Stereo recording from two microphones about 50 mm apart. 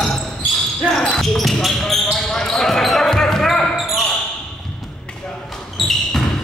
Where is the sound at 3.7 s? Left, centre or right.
Centre.